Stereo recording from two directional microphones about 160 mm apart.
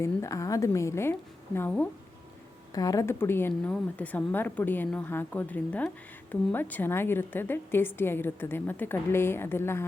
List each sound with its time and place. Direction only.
0.0 s a woman's voice: 20° left (ahead or behind)
2.7 s a woman's voice: 20° left (ahead or behind)